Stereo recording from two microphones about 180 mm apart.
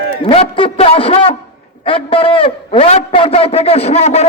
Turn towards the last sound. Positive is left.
turn(degrees=35)  # may be behind; listen again after turning